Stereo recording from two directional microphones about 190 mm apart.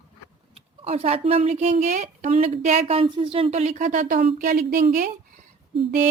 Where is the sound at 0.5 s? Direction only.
30° right (ahead or behind).